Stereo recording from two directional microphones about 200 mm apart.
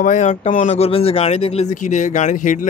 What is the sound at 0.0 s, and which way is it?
Speech, 40° left (ahead or behind).